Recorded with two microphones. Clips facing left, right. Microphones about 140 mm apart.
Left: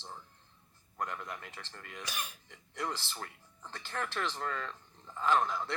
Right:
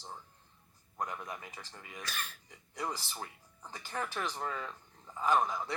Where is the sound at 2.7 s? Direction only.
15° right (ahead or behind).